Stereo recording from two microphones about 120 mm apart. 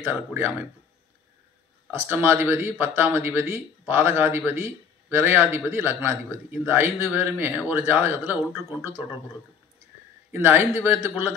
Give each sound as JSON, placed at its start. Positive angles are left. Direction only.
{"t": 0.0, "sound": "a man's voice", "side_deg": -15}
{"t": 1.9, "sound": "a man's voice", "side_deg": -15}
{"t": 10.3, "sound": "speech", "side_deg": -15}